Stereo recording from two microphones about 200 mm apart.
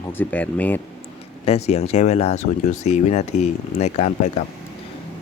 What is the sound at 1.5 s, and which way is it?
Speech, 30° left (ahead or behind).